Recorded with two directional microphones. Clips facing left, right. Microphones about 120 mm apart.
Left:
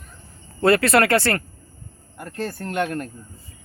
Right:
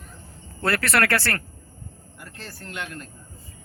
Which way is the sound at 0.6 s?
20° left (ahead or behind).